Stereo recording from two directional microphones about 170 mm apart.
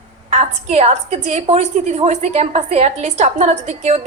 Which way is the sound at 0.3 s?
40° right (ahead or behind).